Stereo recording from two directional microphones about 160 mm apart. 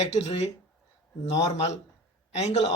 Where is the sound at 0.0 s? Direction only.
45° left (ahead or behind).